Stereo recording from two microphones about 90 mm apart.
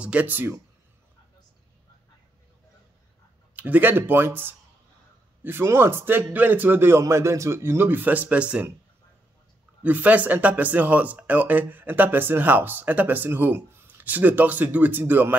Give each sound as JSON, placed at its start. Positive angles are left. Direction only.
{"t": 0.0, "sound": "speech", "side_deg": -15}
{"t": 3.5, "sound": "speech", "side_deg": -20}
{"t": 9.8, "sound": "speech", "side_deg": -20}